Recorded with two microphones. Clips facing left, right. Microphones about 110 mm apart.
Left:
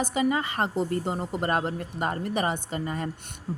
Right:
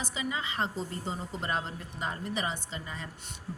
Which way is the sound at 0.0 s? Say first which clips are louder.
Left 10 dB; 55° left (ahead or behind).